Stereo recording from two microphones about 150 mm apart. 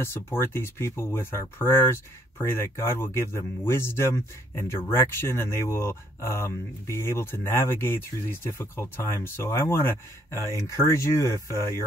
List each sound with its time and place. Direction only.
0.0 s speech: 15° left (ahead or behind)